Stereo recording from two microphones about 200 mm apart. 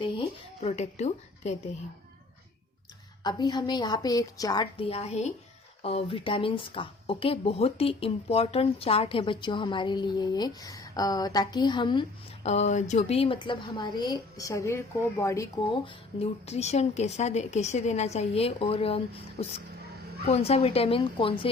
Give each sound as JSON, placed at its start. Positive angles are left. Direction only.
{"t": 0.0, "sound": "a woman's voice", "side_deg": 30}
{"t": 3.2, "sound": "speech", "side_deg": 20}